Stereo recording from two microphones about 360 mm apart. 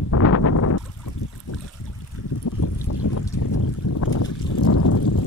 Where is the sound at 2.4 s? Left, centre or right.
Left.